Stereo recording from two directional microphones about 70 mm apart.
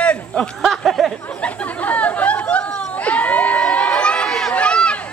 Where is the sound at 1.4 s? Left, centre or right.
Left.